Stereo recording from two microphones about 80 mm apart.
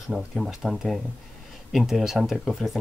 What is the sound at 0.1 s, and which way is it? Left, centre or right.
Speech, centre.